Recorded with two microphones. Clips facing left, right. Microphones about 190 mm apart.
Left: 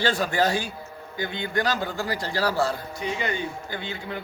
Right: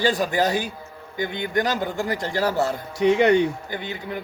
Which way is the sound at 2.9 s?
75° right (ahead or behind).